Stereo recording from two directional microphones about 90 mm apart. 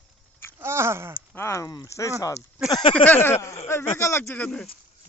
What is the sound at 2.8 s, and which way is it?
Speech, 90° left.